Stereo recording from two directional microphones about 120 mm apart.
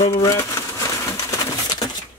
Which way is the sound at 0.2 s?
25° left (ahead or behind).